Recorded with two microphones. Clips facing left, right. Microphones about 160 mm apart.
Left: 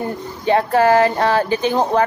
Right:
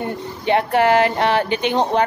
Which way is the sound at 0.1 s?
20° right (ahead or behind).